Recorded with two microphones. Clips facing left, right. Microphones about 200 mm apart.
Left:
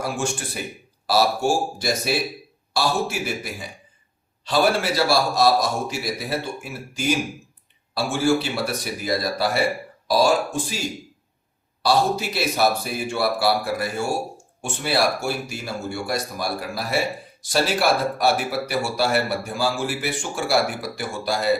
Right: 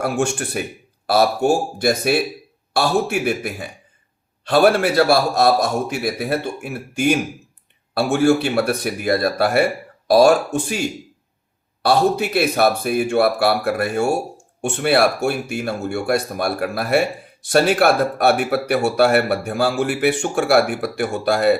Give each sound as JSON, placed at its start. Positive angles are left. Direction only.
{"t": 0.0, "sound": "speech", "side_deg": -60}